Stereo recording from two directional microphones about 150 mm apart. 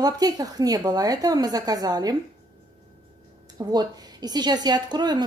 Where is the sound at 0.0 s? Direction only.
25° right (ahead or behind).